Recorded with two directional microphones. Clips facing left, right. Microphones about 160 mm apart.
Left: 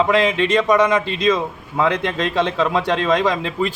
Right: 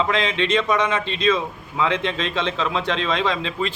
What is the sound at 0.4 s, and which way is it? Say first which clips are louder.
Speech: left 5 dB; 10° left (ahead or behind).